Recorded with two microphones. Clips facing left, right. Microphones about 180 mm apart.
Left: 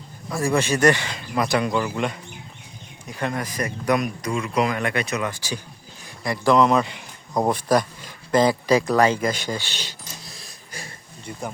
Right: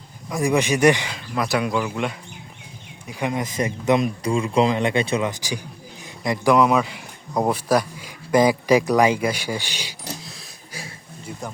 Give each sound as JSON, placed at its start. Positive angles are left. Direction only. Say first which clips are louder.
{"t": 0.3, "sound": "a man's voice", "louder": "right 2 dB", "side_deg": -15}
{"t": 1.1, "sound": "speech", "louder": "left 1 dB", "side_deg": -5}
{"t": 3.1, "sound": "a man's voice", "louder": "right 2 dB", "side_deg": -15}
{"t": 10.2, "sound": "a sound", "louder": "right 2 dB", "side_deg": 0}